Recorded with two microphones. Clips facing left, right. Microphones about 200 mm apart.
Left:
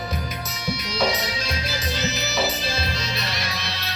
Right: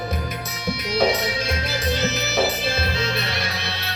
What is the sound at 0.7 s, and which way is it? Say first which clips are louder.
Music: right 4 dB; 55° right (ahead or behind).